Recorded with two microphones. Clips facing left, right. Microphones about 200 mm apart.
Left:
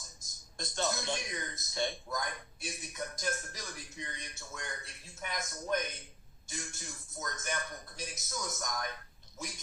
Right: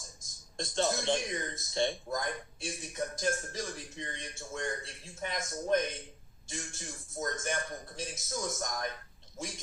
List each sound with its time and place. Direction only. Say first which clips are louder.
0.6 s speech: right 4 dB; 30° right (ahead or behind)